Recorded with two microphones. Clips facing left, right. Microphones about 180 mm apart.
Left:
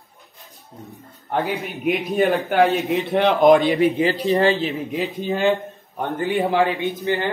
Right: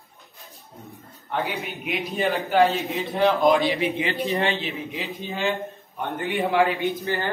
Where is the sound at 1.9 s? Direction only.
55° left (ahead or behind).